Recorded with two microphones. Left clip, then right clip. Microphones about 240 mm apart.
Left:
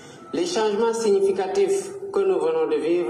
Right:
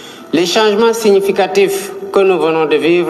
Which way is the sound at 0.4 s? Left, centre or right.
Right.